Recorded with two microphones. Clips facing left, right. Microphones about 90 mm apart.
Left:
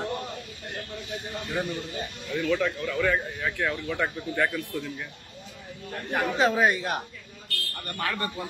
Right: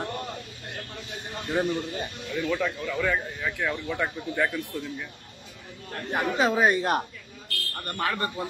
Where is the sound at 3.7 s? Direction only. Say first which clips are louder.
Even; 15° right (ahead or behind).